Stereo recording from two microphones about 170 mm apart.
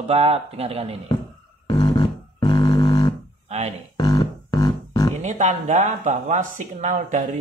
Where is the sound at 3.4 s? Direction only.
40° right (ahead or behind).